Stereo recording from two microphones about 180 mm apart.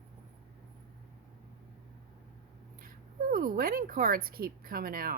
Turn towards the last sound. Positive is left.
turn(degrees=-55)  # may be behind; listen again after turning